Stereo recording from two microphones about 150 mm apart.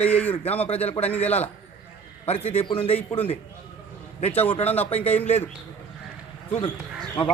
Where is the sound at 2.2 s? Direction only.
40° left (ahead or behind).